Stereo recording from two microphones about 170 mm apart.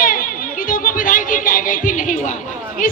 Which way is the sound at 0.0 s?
55° left (ahead or behind).